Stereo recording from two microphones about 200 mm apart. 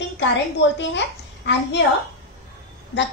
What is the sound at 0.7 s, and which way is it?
A child's voice, 60° left (ahead or behind).